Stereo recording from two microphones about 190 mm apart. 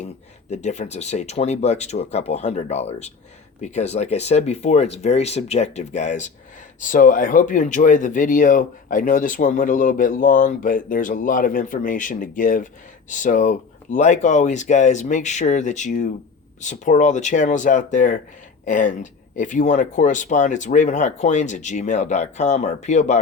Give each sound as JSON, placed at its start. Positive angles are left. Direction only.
{"t": 0.5, "sound": "speech", "side_deg": 35}